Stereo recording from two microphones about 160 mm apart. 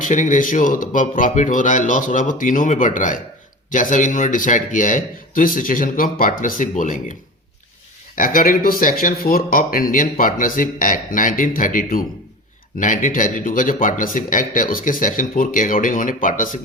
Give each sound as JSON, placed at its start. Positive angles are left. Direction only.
{"t": 0.0, "sound": "a man's voice", "side_deg": 50}
{"t": 8.1, "sound": "speech", "side_deg": 60}